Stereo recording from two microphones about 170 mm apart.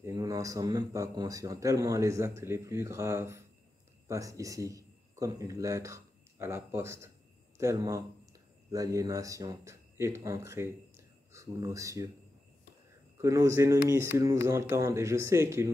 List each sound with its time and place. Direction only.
0.0 s a man's voice: 20° right (ahead or behind)
13.2 s speech: 15° right (ahead or behind)